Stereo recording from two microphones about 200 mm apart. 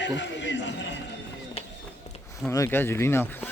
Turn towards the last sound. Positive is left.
turn(degrees=10)  # may be behind; listen again after turning